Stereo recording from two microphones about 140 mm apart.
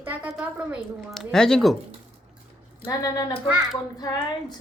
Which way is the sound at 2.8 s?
25° left (ahead or behind).